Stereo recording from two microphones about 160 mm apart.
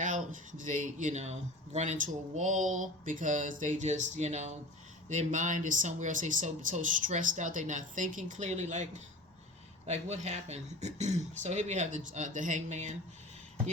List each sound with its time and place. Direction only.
0.0 s speech: 55° right (ahead or behind)